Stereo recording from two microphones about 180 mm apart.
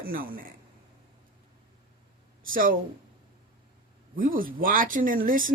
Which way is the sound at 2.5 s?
50° right (ahead or behind).